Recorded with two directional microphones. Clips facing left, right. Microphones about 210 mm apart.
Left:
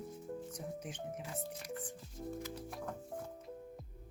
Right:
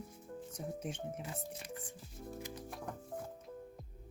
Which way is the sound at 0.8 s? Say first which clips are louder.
Right 2 dB; 25° right (ahead or behind).